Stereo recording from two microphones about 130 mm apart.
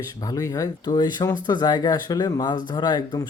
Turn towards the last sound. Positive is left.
turn(degrees=35)  # may be behind; listen again after turning